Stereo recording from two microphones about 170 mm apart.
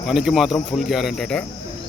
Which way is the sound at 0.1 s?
5° right (ahead or behind).